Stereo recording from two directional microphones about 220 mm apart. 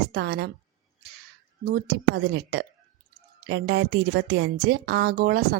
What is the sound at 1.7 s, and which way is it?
A woman's voice, 45° right (ahead or behind).